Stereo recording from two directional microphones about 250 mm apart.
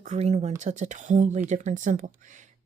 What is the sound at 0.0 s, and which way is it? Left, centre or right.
A woman's voice, right.